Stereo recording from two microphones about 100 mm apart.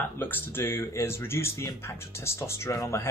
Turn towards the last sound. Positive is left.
turn(degrees=30)  # may be behind; listen again after turning